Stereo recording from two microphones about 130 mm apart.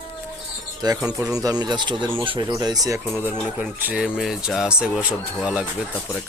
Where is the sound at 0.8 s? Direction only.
30° right (ahead or behind).